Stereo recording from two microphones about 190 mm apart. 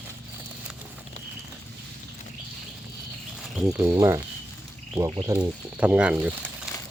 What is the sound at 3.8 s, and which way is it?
Speech, 15° right (ahead or behind).